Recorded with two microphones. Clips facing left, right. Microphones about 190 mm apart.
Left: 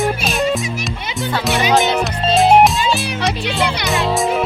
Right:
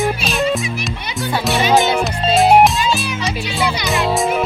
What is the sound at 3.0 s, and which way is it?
Music, 60° left (ahead or behind).